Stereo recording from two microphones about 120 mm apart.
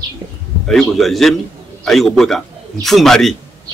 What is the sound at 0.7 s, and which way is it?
A man's voice, centre (ahead or behind).